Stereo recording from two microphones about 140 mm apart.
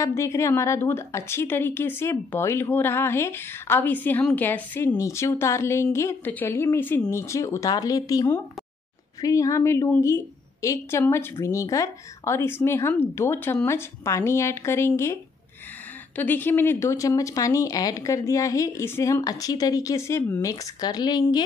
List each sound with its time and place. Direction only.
0.0 s a woman's voice: 20° left (ahead or behind)
16.2 s a woman's voice: 15° left (ahead or behind); by 21.4 s 30° left (ahead or behind)